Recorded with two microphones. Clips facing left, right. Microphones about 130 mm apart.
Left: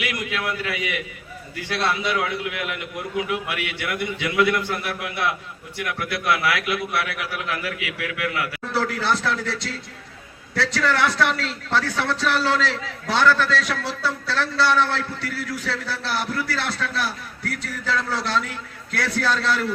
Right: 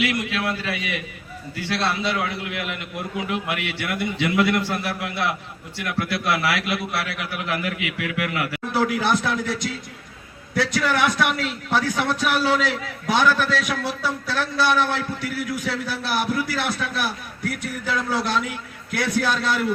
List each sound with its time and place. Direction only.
0.0 s a man's voice: 30° right (ahead or behind)
2.0 s a man's voice: 30° right (ahead or behind)
8.7 s a man's voice: 15° right (ahead or behind)